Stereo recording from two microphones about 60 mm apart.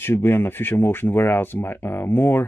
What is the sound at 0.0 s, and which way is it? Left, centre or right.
Speech, left.